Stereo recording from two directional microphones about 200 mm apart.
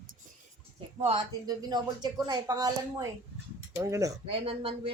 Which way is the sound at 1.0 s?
25° right (ahead or behind).